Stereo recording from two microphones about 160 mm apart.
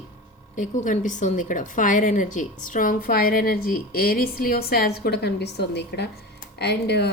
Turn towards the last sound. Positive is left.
turn(degrees=90)